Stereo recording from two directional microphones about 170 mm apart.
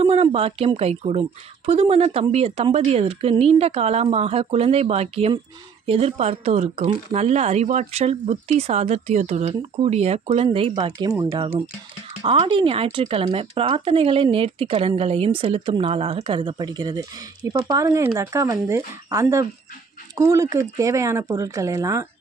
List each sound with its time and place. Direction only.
0.0 s speech: 35° right (ahead or behind)
11.0 s speech: 20° right (ahead or behind)
12.2 s speech: 30° right (ahead or behind)